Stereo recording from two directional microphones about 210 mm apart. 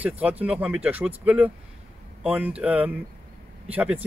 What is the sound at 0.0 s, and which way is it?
A man's voice, 5° right (ahead or behind).